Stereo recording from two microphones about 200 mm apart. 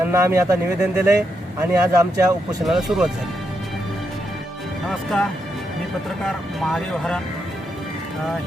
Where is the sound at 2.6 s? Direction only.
Centre (ahead or behind).